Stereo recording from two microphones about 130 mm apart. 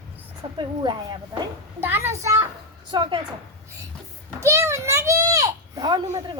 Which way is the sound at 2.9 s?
35° right (ahead or behind).